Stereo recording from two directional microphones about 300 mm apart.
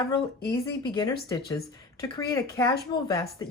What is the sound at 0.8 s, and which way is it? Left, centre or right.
Speech, centre.